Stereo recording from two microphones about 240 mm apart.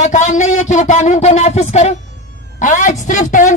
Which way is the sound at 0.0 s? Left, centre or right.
Left.